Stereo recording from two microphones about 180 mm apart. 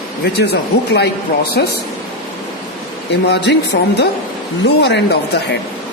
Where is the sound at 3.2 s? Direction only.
75° left (ahead or behind).